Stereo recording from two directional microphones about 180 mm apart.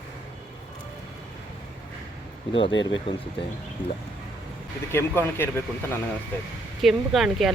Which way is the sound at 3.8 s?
10° left (ahead or behind).